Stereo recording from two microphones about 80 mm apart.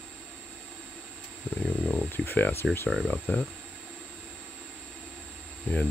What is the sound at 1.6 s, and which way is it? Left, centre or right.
Speech, centre.